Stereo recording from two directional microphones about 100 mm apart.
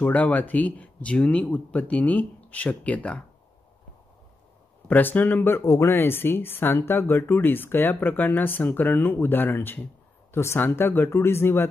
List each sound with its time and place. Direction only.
0.0 s speech: 15° left (ahead or behind)
4.8 s speech: 15° left (ahead or behind)